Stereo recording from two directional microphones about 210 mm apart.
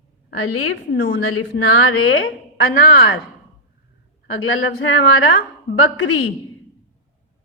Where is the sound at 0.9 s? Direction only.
65° left (ahead or behind).